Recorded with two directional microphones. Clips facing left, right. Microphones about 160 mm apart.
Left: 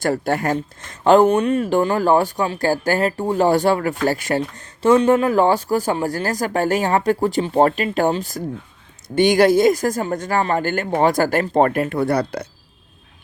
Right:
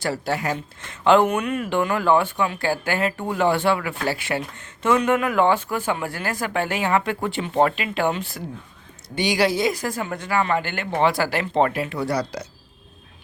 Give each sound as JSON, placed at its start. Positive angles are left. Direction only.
{"t": 0.0, "sound": "speech", "side_deg": 50}
{"t": 9.1, "sound": "speech", "side_deg": 50}